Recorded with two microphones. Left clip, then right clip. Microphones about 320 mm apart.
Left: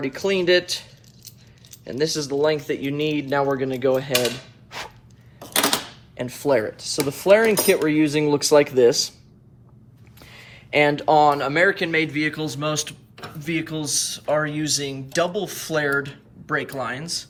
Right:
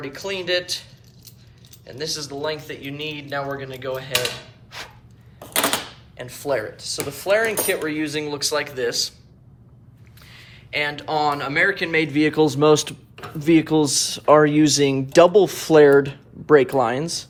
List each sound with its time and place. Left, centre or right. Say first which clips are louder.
0.0 s speech: left 6 dB; left
4.7 s dog: left 2 dB; centre
5.4 s a sound: left 1 dB; centre
6.1 s cutlery: left 4 dB; left
10.2 s speech: left 1 dB; centre